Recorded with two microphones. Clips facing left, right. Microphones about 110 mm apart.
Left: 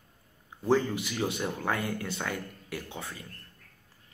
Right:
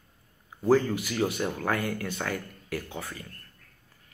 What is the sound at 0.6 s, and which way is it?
Speech, 25° left (ahead or behind).